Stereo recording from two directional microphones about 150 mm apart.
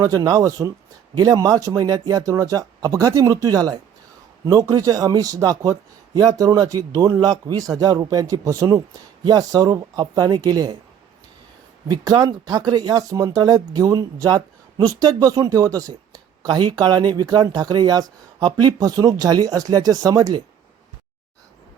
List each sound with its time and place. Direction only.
0.0 s speech: 25° right (ahead or behind)
11.9 s speech: 25° right (ahead or behind)